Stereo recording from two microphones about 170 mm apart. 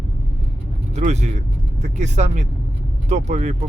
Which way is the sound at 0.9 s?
40° right (ahead or behind).